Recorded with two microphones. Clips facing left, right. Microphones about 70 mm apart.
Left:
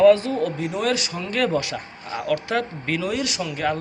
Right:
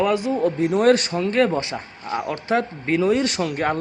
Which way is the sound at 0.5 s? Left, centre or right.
Right.